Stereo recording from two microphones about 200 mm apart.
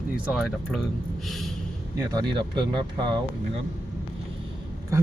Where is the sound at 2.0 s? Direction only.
20° right (ahead or behind).